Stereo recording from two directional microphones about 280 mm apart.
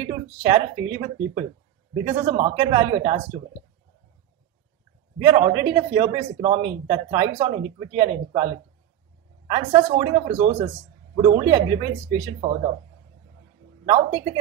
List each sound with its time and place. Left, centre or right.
0.0 s speech: centre
5.2 s speech: centre
9.5 s speech: centre
13.8 s speech: centre